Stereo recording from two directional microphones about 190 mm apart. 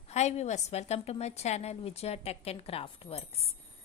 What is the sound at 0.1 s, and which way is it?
A woman's voice, 35° left (ahead or behind).